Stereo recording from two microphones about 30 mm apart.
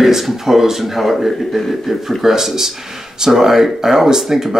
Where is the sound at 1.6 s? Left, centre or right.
Centre.